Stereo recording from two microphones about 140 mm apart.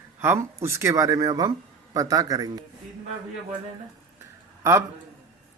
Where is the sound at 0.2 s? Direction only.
20° right (ahead or behind).